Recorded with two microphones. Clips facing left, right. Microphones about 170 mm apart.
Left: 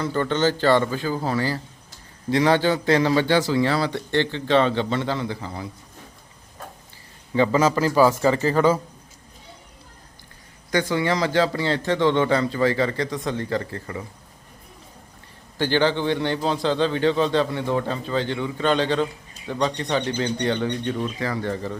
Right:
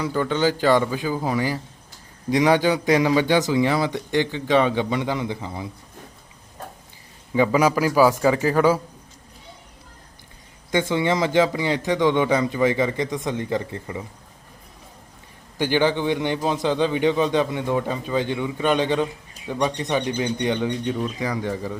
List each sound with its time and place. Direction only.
0.0 s a man's voice: 5° right (ahead or behind)
7.3 s a man's voice: 10° right (ahead or behind)
10.7 s a man's voice: 20° right (ahead or behind)
15.5 s a man's voice: 15° right (ahead or behind)